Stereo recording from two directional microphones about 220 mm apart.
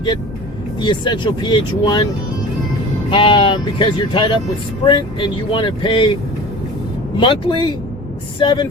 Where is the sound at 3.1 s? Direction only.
20° left (ahead or behind).